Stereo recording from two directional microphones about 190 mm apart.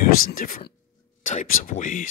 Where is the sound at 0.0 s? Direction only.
50° left (ahead or behind).